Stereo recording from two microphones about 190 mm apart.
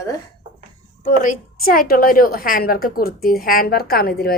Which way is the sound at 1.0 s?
45° left (ahead or behind).